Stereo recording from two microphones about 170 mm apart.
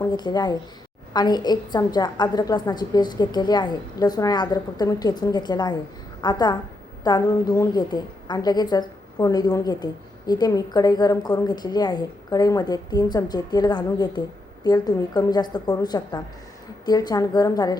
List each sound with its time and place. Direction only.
0.0 s a woman's voice: 25° left (ahead or behind)